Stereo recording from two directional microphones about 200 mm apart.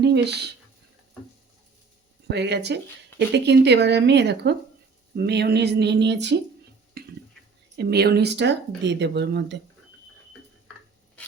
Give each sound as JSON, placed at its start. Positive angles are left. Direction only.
{"t": 0.0, "sound": "speech", "side_deg": -55}
{"t": 2.3, "sound": "speech", "side_deg": -55}
{"t": 7.0, "sound": "a sound", "side_deg": -50}
{"t": 7.8, "sound": "speech", "side_deg": -55}